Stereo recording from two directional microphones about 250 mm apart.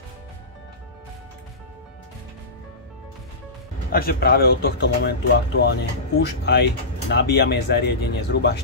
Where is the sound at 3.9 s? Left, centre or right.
Left.